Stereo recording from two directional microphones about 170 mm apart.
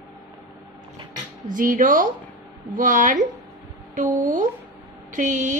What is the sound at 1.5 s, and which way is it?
A woman's voice, 50° right (ahead or behind).